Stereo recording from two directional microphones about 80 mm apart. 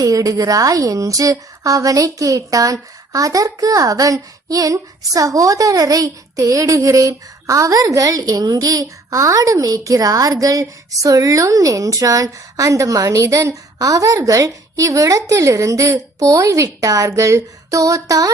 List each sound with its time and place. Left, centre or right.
0.0 s a woman's voice: right